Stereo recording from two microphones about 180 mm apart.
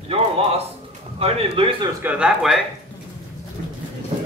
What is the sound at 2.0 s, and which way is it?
Speech, 5° right (ahead or behind).